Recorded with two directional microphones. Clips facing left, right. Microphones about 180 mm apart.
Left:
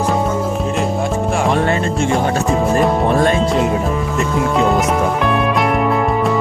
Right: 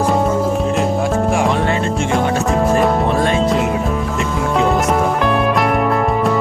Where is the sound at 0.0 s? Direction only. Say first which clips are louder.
Right 2 dB; centre (ahead or behind).